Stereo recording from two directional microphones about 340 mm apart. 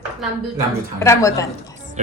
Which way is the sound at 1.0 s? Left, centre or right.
Centre.